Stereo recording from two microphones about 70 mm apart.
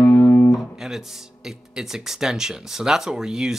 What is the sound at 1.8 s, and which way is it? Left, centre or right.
Speech, centre.